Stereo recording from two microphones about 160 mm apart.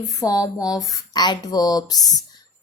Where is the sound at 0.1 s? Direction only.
20° left (ahead or behind).